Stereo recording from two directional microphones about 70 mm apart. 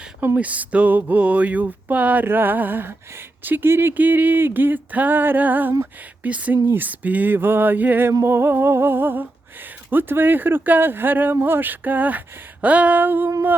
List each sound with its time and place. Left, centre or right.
0.3 s speech: right